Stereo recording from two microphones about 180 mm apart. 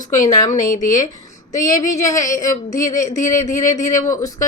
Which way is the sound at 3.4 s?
20° left (ahead or behind).